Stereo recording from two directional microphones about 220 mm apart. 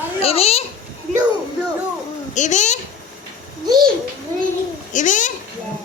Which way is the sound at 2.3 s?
35° left (ahead or behind).